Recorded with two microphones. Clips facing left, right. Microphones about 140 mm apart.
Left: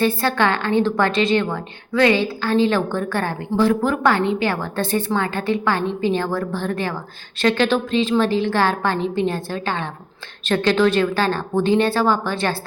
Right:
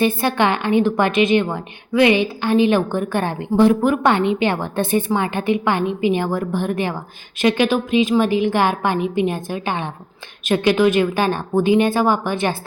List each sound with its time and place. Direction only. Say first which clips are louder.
0.0 s a woman's voice: right 1 dB; 15° right (ahead or behind)